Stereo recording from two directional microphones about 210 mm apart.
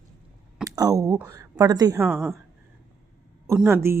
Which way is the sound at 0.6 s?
15° right (ahead or behind).